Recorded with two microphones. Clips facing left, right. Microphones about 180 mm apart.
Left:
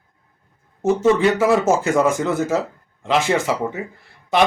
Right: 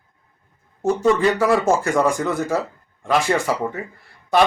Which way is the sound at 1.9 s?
5° left (ahead or behind).